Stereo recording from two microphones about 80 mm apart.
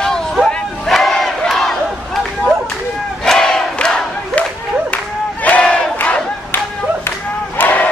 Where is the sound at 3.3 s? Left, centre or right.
Centre.